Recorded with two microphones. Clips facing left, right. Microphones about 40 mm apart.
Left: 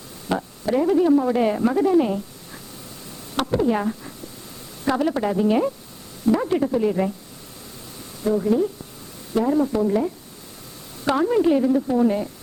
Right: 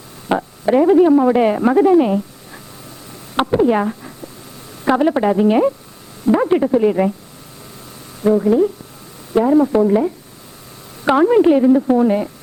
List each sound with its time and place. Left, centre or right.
0.3 s speech: right
3.3 s a sound: right
4.9 s a woman's voice: right
8.2 s a woman's voice: right